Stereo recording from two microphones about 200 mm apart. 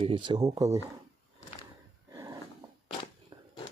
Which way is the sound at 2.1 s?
20° right (ahead or behind).